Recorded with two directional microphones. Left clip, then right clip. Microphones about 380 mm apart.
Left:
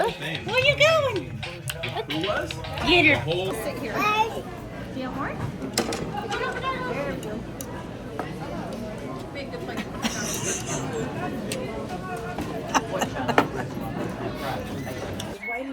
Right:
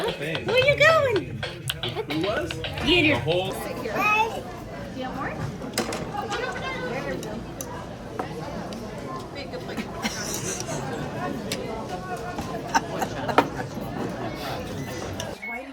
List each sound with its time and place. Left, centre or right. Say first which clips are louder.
0.0 s a child's voice: left 1 dB; centre
10.2 s chatter: left 1 dB; centre
12.7 s chatter: even; centre